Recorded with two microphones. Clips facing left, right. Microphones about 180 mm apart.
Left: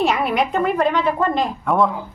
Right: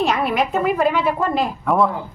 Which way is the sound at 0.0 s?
Centre (ahead or behind).